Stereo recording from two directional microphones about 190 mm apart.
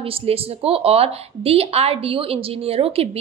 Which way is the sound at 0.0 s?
30° right (ahead or behind).